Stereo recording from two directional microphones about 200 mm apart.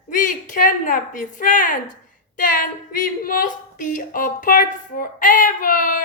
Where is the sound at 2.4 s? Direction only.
40° left (ahead or behind).